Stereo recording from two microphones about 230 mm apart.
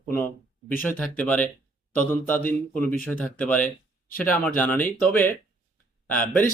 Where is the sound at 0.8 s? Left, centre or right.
Centre.